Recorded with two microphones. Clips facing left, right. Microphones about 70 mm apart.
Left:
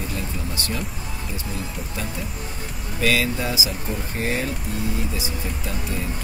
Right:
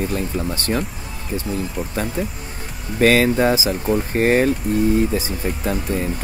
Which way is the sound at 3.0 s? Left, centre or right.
Right.